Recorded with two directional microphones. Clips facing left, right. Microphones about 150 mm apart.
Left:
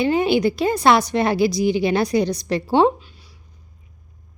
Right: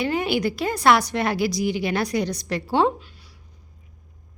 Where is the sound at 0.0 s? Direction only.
25° left (ahead or behind).